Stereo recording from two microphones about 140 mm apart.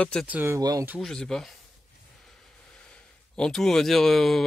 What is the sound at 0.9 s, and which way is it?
Speech, 5° left (ahead or behind).